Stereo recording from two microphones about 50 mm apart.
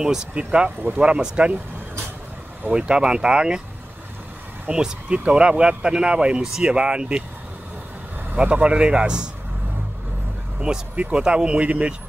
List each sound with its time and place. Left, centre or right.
0.3 s speech: right
2.7 s speech: centre
4.6 s speech: centre
8.3 s speech: right
10.6 s speech: centre